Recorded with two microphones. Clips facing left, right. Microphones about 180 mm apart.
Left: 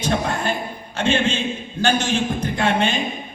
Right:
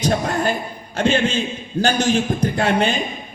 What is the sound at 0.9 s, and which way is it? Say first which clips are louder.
A man's voice: right 2 dB; 40° right (ahead or behind).